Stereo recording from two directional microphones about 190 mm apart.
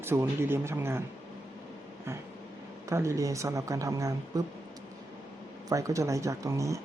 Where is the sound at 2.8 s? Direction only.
15° right (ahead or behind).